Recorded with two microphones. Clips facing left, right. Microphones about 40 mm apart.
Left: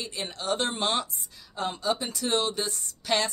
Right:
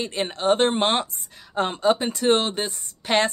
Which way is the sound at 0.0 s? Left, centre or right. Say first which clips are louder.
Right 9 dB; right.